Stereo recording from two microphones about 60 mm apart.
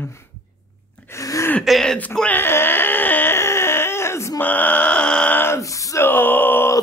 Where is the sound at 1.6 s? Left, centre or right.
Centre.